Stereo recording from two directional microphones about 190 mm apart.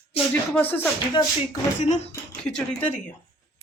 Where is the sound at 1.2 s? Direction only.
25° left (ahead or behind).